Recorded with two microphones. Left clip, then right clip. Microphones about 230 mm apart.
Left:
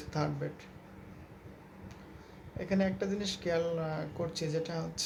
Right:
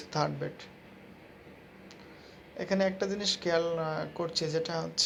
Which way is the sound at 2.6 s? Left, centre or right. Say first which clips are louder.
Right 4 dB; centre.